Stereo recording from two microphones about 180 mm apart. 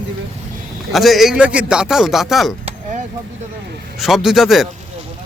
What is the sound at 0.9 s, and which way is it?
A man's voice, centre (ahead or behind).